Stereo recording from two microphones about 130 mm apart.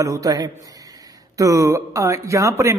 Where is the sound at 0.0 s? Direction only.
25° right (ahead or behind).